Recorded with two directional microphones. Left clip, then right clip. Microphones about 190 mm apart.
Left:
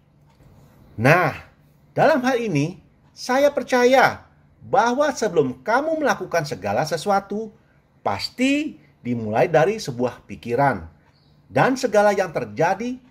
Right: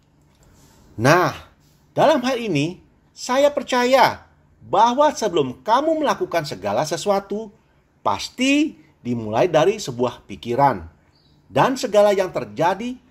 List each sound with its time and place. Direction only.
0.9 s a man's voice: 35° right (ahead or behind)